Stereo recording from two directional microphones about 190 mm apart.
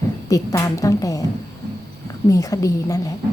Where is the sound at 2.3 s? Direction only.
15° left (ahead or behind).